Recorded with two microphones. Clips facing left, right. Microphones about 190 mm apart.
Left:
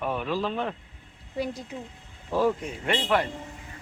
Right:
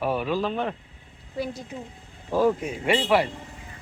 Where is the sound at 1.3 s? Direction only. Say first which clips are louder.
Even; 15° left (ahead or behind).